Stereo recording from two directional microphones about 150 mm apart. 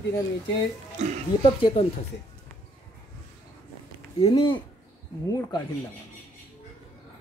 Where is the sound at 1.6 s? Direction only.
40° left (ahead or behind).